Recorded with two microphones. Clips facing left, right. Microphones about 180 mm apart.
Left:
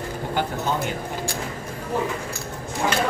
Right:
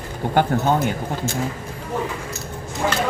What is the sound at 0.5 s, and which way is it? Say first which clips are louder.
Speech: right 7 dB; 50° right (ahead or behind).